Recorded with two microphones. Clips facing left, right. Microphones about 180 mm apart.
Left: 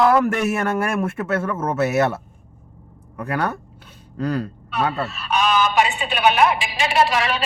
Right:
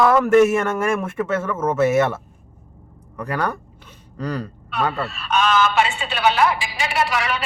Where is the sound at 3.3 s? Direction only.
5° left (ahead or behind).